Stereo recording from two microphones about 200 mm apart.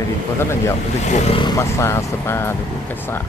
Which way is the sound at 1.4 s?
15° left (ahead or behind).